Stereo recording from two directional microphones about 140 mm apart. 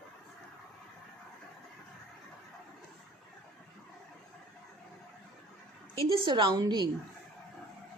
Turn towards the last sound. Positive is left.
turn(degrees=-30)  # may be behind; listen again after turning